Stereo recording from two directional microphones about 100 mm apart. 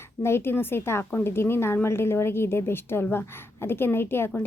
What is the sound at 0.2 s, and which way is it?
A woman's voice, 25° left (ahead or behind).